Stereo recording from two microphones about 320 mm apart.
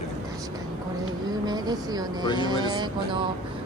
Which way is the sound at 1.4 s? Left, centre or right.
Centre.